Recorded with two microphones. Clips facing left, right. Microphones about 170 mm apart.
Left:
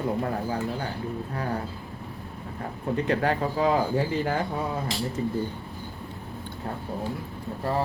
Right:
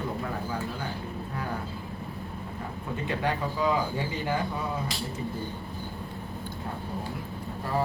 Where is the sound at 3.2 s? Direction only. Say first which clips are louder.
Left 4 dB; 50° left (ahead or behind).